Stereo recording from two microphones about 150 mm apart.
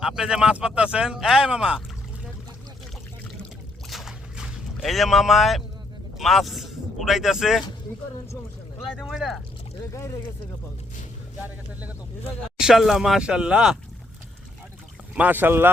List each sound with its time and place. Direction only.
0.0 s speech: 5° right (ahead or behind)
3.8 s boat: centre (ahead or behind)
6.1 s speech: centre (ahead or behind)
9.0 s speech: centre (ahead or behind)
9.9 s speech: 20° left (ahead or behind)
12.5 s speech: 5° right (ahead or behind)
15.1 s speech: 10° right (ahead or behind)